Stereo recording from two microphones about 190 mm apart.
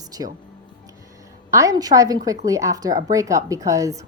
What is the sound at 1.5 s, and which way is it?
Speech, 15° right (ahead or behind).